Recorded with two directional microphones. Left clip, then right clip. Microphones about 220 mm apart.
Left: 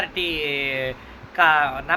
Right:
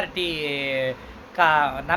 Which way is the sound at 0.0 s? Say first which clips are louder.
Left 2 dB; 15° right (ahead or behind).